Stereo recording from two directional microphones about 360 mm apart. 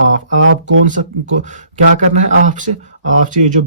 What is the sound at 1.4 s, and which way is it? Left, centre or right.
Speech, centre.